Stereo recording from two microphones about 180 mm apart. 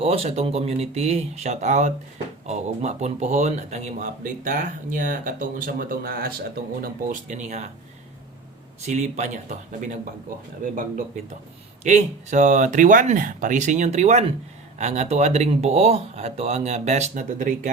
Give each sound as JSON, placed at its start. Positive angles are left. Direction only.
{"t": 0.0, "sound": "speech", "side_deg": -35}
{"t": 6.8, "sound": "speech", "side_deg": -45}
{"t": 8.8, "sound": "speech", "side_deg": -40}